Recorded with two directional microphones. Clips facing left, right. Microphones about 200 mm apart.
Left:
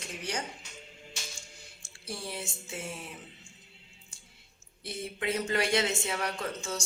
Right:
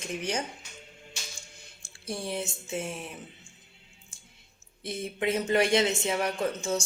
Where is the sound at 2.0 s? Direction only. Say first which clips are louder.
Right 6 dB; 20° right (ahead or behind).